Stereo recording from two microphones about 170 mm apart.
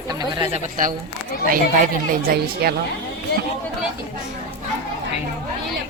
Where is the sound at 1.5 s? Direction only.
55° right (ahead or behind).